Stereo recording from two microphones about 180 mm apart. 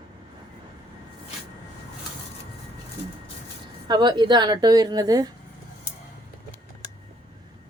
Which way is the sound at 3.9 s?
25° right (ahead or behind).